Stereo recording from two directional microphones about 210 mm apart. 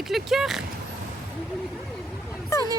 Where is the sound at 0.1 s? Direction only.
Centre (ahead or behind).